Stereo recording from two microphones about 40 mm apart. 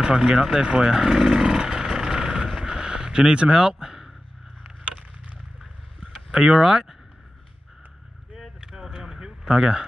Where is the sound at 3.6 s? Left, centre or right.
Centre.